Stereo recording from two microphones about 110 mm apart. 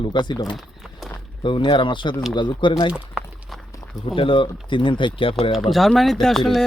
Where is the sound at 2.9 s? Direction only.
5° right (ahead or behind).